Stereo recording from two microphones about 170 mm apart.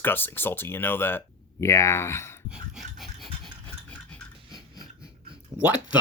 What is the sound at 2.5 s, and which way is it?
Dog, centre (ahead or behind).